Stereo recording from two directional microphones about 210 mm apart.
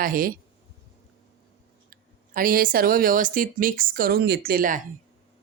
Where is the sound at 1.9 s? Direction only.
40° right (ahead or behind).